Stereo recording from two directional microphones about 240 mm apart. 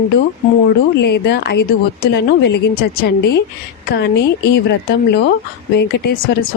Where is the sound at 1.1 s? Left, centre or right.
Left.